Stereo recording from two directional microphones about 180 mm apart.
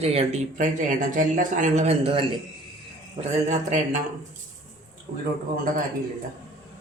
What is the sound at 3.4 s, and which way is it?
Speech, 40° right (ahead or behind).